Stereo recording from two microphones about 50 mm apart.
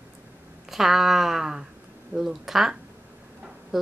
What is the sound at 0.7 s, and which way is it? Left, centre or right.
Speech, centre.